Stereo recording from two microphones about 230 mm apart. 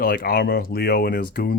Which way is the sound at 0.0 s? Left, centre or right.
Left.